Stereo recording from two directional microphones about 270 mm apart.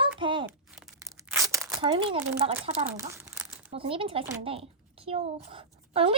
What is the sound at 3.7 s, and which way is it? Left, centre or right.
A child's voice, centre.